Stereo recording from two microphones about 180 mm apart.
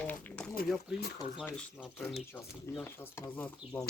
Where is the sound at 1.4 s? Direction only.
5° left (ahead or behind).